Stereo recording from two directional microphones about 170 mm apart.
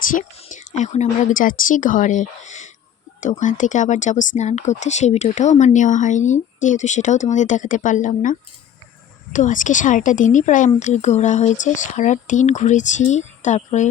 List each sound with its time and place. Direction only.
0.1 s speech: 50° left (ahead or behind)